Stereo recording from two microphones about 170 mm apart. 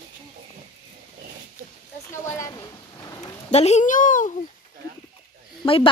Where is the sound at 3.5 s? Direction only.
40° left (ahead or behind).